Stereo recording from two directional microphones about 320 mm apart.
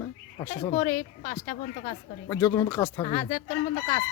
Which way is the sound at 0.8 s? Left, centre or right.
Left.